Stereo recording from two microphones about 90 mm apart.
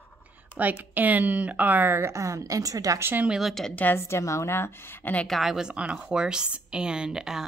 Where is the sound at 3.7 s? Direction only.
25° left (ahead or behind).